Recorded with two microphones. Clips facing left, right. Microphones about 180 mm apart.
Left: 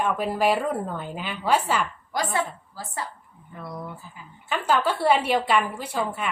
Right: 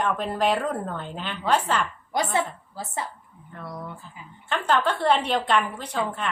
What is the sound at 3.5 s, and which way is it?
Speech, 5° left (ahead or behind).